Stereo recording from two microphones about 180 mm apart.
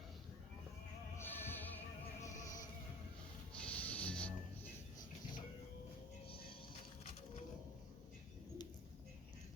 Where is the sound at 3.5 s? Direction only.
10° left (ahead or behind).